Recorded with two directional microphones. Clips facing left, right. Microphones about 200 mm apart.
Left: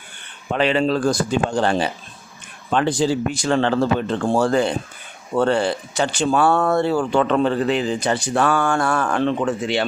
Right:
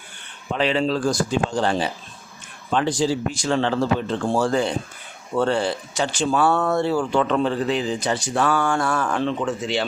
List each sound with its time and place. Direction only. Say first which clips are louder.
0.5 s speech: left 3 dB; 60° left (ahead or behind)